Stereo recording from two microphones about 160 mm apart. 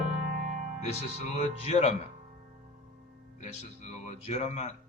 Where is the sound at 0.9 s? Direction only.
45° left (ahead or behind).